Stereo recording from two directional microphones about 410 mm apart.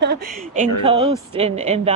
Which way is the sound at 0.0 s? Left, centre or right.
Right.